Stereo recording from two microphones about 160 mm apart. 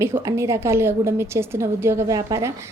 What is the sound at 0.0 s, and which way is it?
Speech, 15° right (ahead or behind).